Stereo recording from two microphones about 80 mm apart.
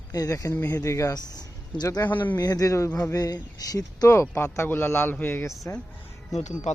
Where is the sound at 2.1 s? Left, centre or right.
Left.